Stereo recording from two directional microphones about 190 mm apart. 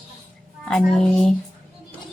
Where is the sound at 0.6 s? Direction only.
5° left (ahead or behind).